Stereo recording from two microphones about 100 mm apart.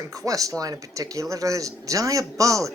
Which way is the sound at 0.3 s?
35° right (ahead or behind).